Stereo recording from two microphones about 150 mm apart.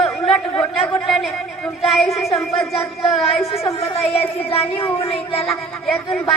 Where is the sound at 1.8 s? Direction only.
Centre (ahead or behind).